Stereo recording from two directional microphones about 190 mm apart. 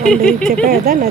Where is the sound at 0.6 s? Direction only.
50° right (ahead or behind).